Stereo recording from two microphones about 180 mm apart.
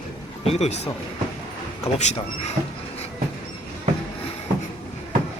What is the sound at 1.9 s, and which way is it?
Speech, 35° left (ahead or behind).